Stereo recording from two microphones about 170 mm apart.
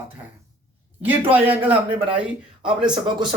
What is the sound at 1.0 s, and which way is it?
Speech, 10° right (ahead or behind).